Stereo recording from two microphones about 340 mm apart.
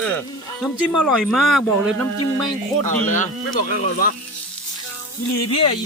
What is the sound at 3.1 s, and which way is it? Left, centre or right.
Speech, left.